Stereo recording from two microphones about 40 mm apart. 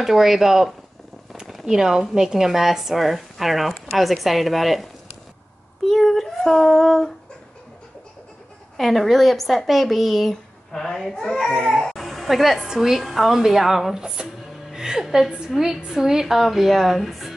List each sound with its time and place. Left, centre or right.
0.0 s a woman's voice: centre
1.3 s a sound: centre
1.7 s a woman's voice: centre
5.9 s child singing: centre
8.7 s a woman's voice: centre
11.9 s a sound: centre
12.7 s a woman's voice: centre